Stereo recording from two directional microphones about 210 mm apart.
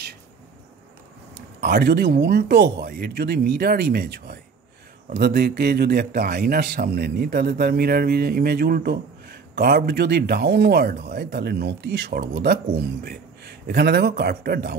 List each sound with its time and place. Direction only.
1.3 s a man's voice: 50° right (ahead or behind)